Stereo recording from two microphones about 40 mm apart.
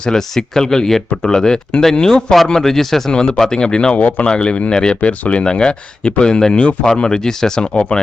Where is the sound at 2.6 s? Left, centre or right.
Centre.